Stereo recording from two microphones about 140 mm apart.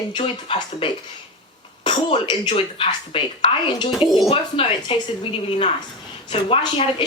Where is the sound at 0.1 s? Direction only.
35° left (ahead or behind).